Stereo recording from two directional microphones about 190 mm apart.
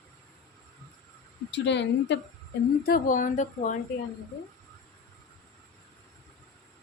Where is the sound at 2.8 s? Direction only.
50° left (ahead or behind).